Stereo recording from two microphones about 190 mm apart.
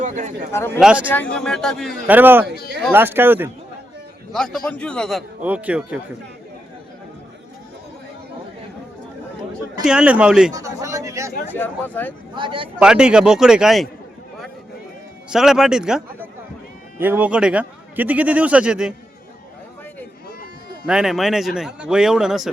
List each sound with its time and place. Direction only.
0.0 s a man's voice: 40° right (ahead or behind)
0.5 s speech: 15° left (ahead or behind)
0.8 s a man's voice: 5° right (ahead or behind)
1.0 s a man's voice: 10° left (ahead or behind)
2.0 s a man's voice: 10° right (ahead or behind)
4.3 s a man's voice: centre (ahead or behind)
5.4 s a man's voice: 5° right (ahead or behind)
9.8 s a man's voice: 5° right (ahead or behind)
10.5 s speech: 15° right (ahead or behind)
11.5 s speech: 10° left (ahead or behind)
12.3 s a man's voice: 25° right (ahead or behind)
12.8 s a man's voice: 5° right (ahead or behind)
15.3 s a man's voice: centre (ahead or behind)
20.8 s a man's voice: 5° right (ahead or behind)